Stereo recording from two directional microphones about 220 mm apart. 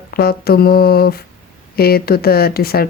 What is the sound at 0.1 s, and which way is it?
Speech, 45° left (ahead or behind).